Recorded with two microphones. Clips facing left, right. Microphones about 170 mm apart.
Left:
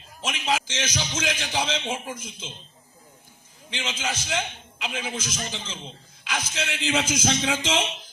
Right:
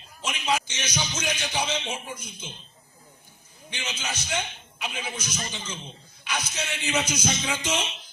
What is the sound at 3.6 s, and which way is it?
A man's voice, 90° left.